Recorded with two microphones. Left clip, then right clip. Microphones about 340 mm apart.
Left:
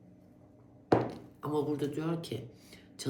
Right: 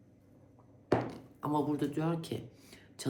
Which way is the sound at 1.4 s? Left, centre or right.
Centre.